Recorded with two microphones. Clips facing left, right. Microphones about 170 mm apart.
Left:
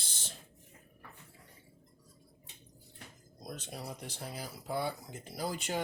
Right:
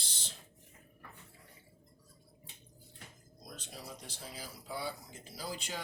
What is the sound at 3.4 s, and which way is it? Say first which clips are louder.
Speech: left 5 dB; 60° left (ahead or behind).